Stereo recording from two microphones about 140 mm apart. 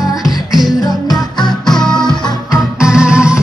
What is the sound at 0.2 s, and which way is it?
Music, centre (ahead or behind).